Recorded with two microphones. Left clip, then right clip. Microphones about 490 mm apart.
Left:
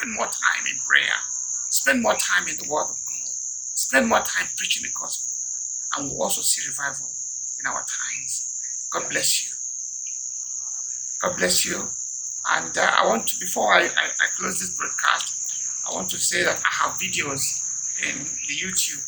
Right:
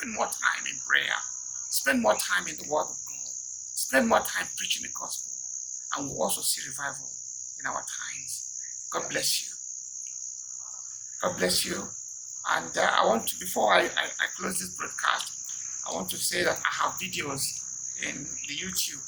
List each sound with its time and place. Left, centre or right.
0.2 s speech: right
3.9 s speech: right
5.9 s speech: right
9.0 s speech: right
11.2 s speech: right
16.2 s speech: right